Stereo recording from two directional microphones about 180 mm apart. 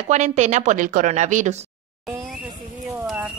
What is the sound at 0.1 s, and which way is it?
A woman's voice, 40° right (ahead or behind).